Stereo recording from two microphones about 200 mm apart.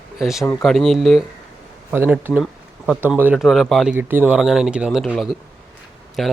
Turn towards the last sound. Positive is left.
turn(degrees=0)  # may be behind; listen again after turning